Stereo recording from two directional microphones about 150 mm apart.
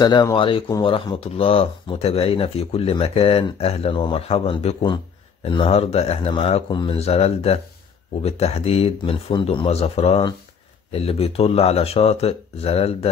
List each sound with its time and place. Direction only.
0.0 s speech: 30° left (ahead or behind)